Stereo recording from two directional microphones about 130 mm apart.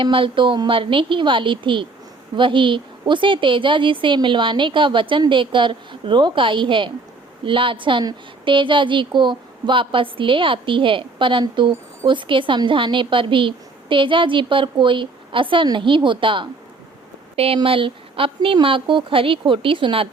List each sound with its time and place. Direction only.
0.0 s a woman's voice: 40° right (ahead or behind)